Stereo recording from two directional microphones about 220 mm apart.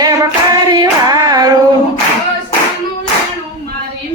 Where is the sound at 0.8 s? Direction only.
15° right (ahead or behind).